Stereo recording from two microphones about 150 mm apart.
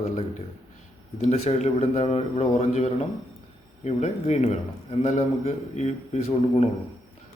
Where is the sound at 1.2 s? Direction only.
45° left (ahead or behind).